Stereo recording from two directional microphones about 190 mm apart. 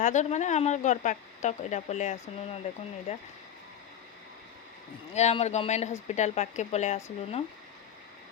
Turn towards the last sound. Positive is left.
turn(degrees=35)  # may be behind; listen again after turning